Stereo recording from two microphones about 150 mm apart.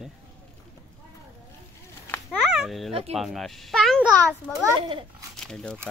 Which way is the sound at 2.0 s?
15° left (ahead or behind).